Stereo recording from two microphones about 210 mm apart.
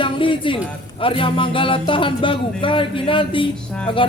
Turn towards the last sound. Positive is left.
turn(degrees=25)  # may be behind; listen again after turning